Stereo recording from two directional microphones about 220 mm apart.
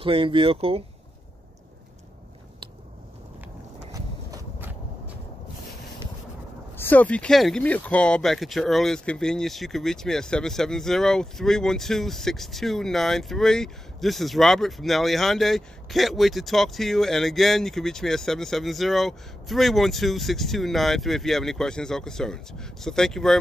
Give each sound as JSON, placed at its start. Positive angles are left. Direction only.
{"t": 0.0, "sound": "speech", "side_deg": -25}
{"t": 3.9, "sound": "a sound", "side_deg": -15}
{"t": 6.8, "sound": "speech", "side_deg": 10}